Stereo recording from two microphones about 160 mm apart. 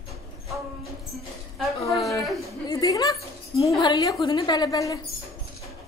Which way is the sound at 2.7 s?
20° left (ahead or behind).